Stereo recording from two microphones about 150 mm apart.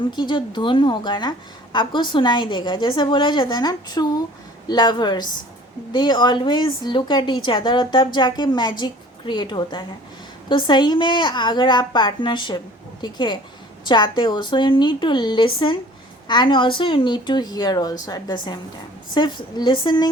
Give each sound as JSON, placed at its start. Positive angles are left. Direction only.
{"t": 0.1, "sound": "a woman's voice", "side_deg": 30}